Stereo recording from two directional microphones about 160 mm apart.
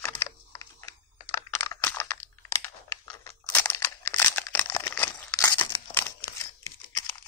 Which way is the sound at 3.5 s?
15° left (ahead or behind).